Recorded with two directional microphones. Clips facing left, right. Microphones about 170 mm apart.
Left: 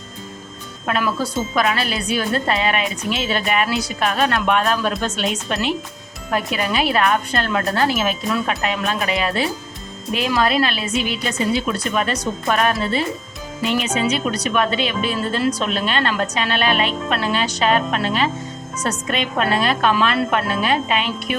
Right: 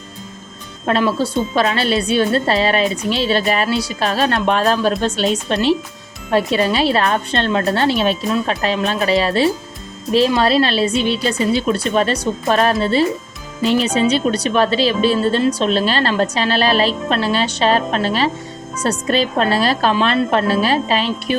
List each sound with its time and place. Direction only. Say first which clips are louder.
0.9 s a woman's voice: right 5 dB; 30° right (ahead or behind)